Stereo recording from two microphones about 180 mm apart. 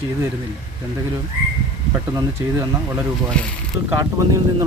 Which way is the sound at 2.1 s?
15° right (ahead or behind).